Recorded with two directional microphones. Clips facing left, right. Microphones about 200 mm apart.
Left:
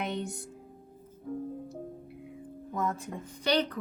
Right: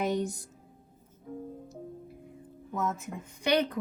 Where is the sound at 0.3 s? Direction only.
60° left (ahead or behind).